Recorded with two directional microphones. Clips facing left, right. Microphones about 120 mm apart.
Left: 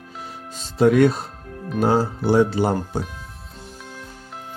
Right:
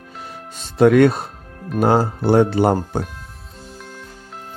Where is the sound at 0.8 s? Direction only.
65° right (ahead or behind).